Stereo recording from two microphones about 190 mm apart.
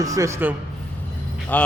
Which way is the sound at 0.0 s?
15° right (ahead or behind).